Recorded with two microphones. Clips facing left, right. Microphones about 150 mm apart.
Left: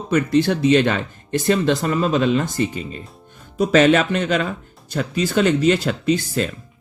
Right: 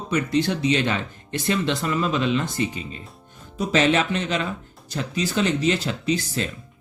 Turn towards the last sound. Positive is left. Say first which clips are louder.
# left 5 dB
turn(degrees=55)  # may be behind; listen again after turning